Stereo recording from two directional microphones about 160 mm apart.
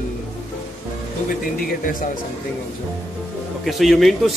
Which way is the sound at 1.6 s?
60° left (ahead or behind).